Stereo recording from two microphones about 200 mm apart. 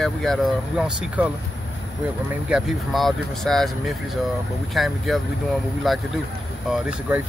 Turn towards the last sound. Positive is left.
turn(degrees=-5)  # may be behind; listen again after turning